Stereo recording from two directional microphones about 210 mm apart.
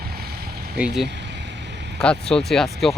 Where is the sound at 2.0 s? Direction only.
5° left (ahead or behind).